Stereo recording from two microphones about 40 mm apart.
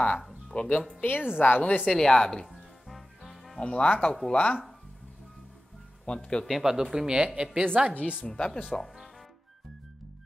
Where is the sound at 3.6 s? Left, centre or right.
Left.